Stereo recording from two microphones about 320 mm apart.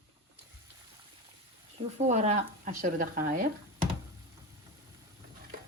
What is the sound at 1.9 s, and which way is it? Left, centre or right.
Speech, right.